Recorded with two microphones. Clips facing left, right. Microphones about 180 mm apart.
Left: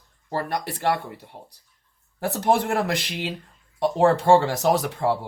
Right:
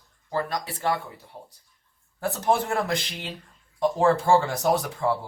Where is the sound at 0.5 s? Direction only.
70° left (ahead or behind).